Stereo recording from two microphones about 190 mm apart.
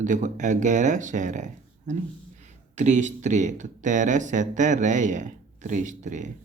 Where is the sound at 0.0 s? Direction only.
40° right (ahead or behind).